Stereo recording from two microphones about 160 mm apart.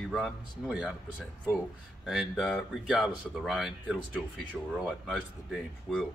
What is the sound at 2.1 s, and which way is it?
Speech, centre (ahead or behind).